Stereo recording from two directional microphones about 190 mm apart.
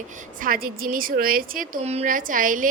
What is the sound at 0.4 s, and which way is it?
A woman's voice, 50° right (ahead or behind).